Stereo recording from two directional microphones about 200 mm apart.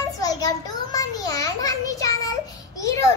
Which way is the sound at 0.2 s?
20° left (ahead or behind).